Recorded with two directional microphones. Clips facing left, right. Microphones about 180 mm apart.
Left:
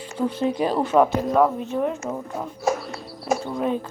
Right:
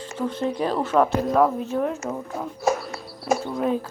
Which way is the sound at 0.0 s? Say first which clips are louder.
Left 2 dB; 10° left (ahead or behind).